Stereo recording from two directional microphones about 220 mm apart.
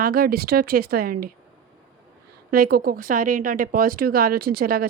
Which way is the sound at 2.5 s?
40° right (ahead or behind).